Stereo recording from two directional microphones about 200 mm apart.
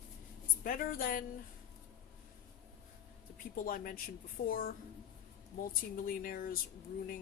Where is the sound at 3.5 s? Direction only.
45° left (ahead or behind).